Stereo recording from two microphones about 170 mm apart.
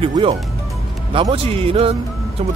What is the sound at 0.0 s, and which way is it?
Speech, 30° right (ahead or behind).